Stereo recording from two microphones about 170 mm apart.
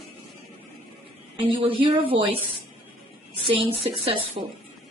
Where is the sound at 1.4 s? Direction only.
30° right (ahead or behind).